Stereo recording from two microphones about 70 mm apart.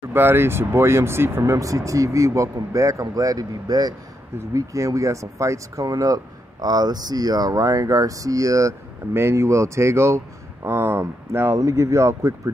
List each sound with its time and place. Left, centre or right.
0.1 s speech: right
4.4 s speech: right
9.1 s speech: right